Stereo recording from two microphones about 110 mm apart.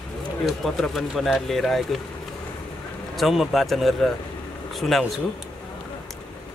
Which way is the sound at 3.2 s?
Centre (ahead or behind).